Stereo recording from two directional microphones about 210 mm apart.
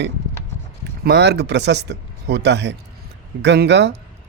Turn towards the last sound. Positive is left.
turn(degrees=-55)  # may be behind; listen again after turning